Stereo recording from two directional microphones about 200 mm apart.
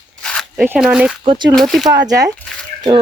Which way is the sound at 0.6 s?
5° right (ahead or behind).